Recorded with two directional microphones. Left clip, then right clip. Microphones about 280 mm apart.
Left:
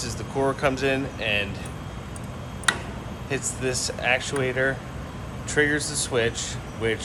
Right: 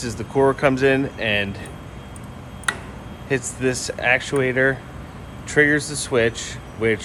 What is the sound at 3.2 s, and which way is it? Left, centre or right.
Speech, right.